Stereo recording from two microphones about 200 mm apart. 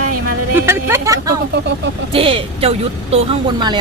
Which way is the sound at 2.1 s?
25° right (ahead or behind).